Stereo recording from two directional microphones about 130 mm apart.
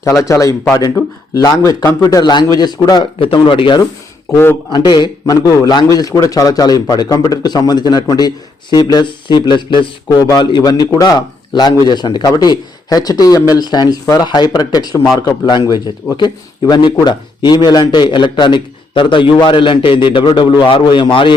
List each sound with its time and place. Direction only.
0.0 s a man's voice: 25° left (ahead or behind)
3.2 s a man's voice: 40° left (ahead or behind)